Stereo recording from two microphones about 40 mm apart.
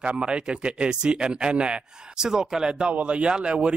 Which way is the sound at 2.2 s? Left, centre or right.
Centre.